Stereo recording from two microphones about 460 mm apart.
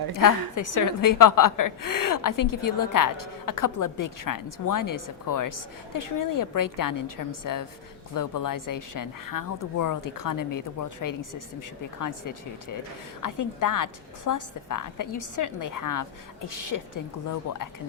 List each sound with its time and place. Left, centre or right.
0.1 s a woman's voice: left